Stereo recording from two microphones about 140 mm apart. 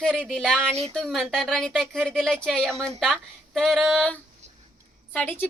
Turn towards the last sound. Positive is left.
turn(degrees=15)  # may be behind; listen again after turning